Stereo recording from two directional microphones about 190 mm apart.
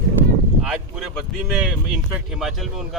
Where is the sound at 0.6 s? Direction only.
Centre (ahead or behind).